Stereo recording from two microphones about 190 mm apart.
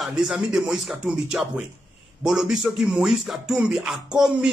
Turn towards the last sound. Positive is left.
turn(degrees=-5)  # may be behind; listen again after turning